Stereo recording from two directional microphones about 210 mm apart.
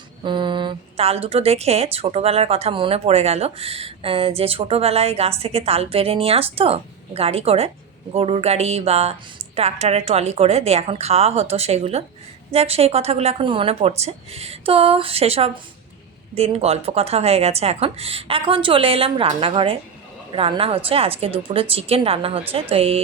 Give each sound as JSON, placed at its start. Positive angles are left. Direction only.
{"t": 0.2, "sound": "a woman's voice", "side_deg": -20}